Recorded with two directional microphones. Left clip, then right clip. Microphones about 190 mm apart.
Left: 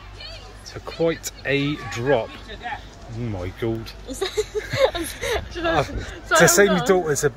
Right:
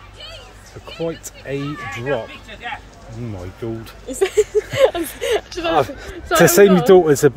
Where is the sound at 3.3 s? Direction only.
Centre (ahead or behind).